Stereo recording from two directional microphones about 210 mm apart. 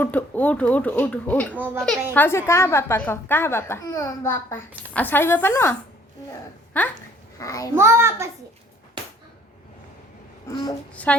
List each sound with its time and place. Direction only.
0.0 s a woman's voice: 10° left (ahead or behind)
1.5 s a child's voice: 10° right (ahead or behind)
2.1 s a woman's voice: 10° left (ahead or behind)
7.3 s a woman's voice: 15° left (ahead or behind)
7.8 s a child's voice: 10° right (ahead or behind)
10.5 s a child's voice: 20° left (ahead or behind)
10.9 s a woman's voice: 5° left (ahead or behind)